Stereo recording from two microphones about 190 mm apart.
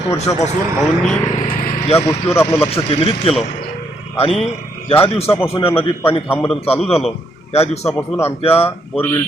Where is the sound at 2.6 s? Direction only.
30° left (ahead or behind).